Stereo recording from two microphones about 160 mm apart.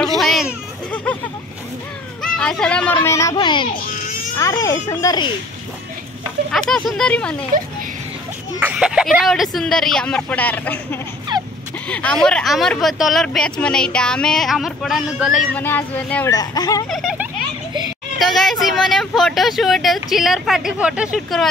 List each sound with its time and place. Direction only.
0.2 s a child's voice: centre (ahead or behind)
2.2 s speech: 5° left (ahead or behind)
3.0 s speech: 20° left (ahead or behind)
3.3 s speech: 30° left (ahead or behind)
6.5 s speech: centre (ahead or behind)
8.5 s speech: 10° right (ahead or behind); by 11.0 s 10° left (ahead or behind)
11.3 s a sound: 30° right (ahead or behind)
11.9 s speech: 5° left (ahead or behind)
15.5 s child singing: 10° left (ahead or behind)
16.3 s speech: 20° left (ahead or behind)
16.9 s a sound: centre (ahead or behind)
18.2 s speech: centre (ahead or behind)